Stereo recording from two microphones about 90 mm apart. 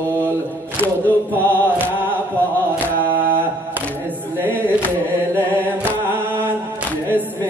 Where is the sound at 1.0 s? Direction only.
20° right (ahead or behind).